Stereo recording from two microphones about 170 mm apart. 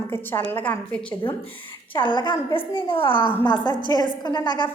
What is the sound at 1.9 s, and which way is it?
A woman's voice, 30° left (ahead or behind).